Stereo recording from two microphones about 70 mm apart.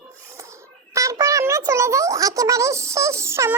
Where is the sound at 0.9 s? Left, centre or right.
Right.